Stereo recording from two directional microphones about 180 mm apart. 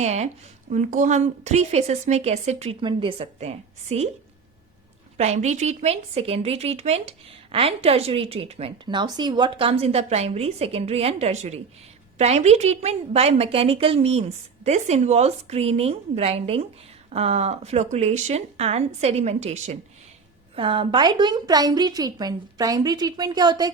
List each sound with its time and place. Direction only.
0.0 s a woman's voice: 35° right (ahead or behind)
5.1 s a woman's voice: 35° right (ahead or behind)